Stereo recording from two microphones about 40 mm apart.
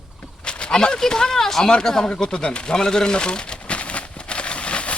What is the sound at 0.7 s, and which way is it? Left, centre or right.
Speech, centre.